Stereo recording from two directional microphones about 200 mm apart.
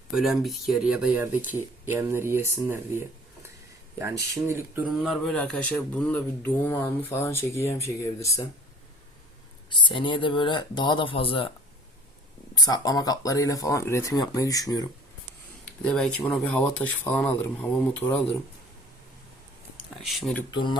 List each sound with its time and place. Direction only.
0.1 s speech: centre (ahead or behind); by 8.4 s 15° left (ahead or behind)
9.6 s speech: 25° left (ahead or behind)
12.5 s speech: 20° left (ahead or behind)
15.8 s speech: 5° left (ahead or behind)
20.1 s speech: centre (ahead or behind)
20.5 s speech: 25° left (ahead or behind)